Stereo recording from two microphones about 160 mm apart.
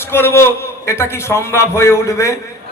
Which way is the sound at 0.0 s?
15° left (ahead or behind).